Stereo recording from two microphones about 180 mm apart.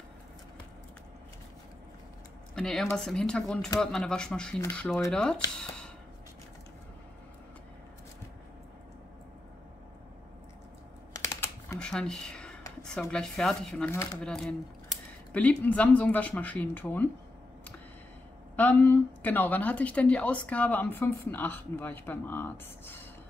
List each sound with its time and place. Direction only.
2.5 s speech: 5° left (ahead or behind)
11.1 s typing: 15° left (ahead or behind)
11.8 s a sound: 5° left (ahead or behind)
13.0 s speech: 5° left (ahead or behind)
18.6 s speech: 10° left (ahead or behind)